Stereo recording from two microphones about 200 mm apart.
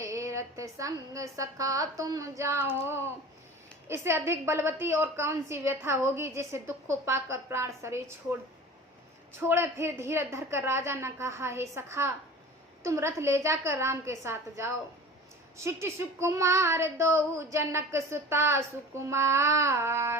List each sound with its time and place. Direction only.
0.0 s a woman's voice: 15° right (ahead or behind)
3.8 s a woman's voice: 10° right (ahead or behind)
9.4 s a woman's voice: 10° right (ahead or behind)